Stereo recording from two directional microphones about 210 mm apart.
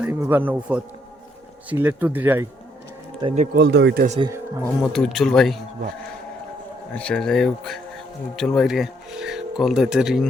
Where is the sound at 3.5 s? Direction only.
55° right (ahead or behind).